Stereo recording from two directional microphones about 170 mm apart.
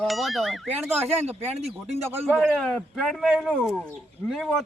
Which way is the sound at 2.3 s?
5° left (ahead or behind).